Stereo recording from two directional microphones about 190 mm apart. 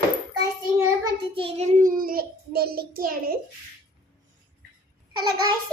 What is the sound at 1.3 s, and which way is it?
Speech, 30° right (ahead or behind).